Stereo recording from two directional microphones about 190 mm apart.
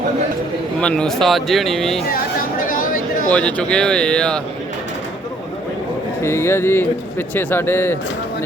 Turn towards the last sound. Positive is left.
turn(degrees=10)  # may be behind; listen again after turning